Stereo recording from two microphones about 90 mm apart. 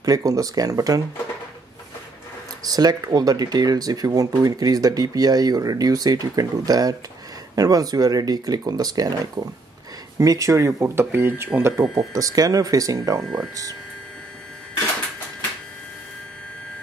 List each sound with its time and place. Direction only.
0.0 s speech: 40° right (ahead or behind)
2.6 s speech: 45° right (ahead or behind)
11.0 s speech: 25° right (ahead or behind)
11.8 s speech: centre (ahead or behind)
12.1 s speech: 40° right (ahead or behind)
13.2 s speech: centre (ahead or behind)